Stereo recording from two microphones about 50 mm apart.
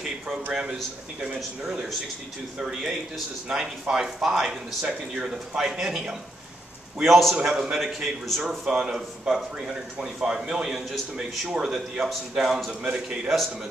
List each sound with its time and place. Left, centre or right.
0.0 s a man's voice: centre
3.4 s speech: centre
5.6 s a man's voice: centre
7.3 s a man's voice: centre
12.6 s a man's voice: centre